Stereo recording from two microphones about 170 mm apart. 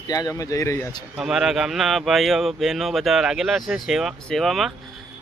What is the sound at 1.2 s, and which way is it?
Speech, 5° right (ahead or behind).